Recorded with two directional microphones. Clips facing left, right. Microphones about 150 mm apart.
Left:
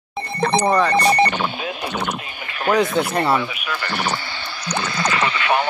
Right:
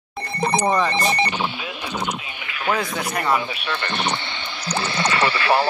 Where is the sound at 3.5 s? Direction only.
25° right (ahead or behind).